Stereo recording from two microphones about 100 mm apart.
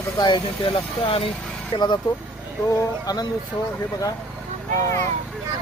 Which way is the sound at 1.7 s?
45° left (ahead or behind).